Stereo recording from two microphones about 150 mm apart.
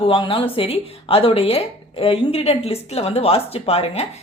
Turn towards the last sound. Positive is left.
turn(degrees=40)  # may be behind; listen again after turning